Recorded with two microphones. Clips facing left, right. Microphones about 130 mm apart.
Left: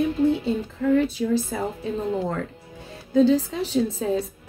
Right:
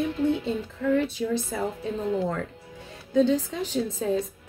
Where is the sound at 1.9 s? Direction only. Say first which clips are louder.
Left 1 dB; 30° left (ahead or behind).